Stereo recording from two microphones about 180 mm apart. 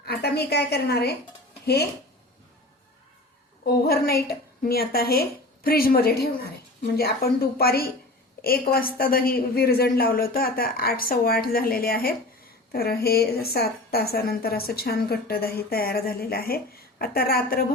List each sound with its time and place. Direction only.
0.0 s a woman's voice: 65° left (ahead or behind)
3.7 s a woman's voice: 60° left (ahead or behind)